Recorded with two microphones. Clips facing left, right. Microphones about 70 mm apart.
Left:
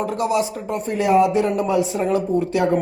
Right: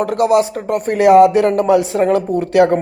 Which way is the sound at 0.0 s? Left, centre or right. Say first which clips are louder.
Right 7 dB; right.